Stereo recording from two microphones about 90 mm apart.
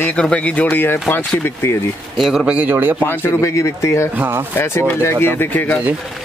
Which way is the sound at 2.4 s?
15° right (ahead or behind).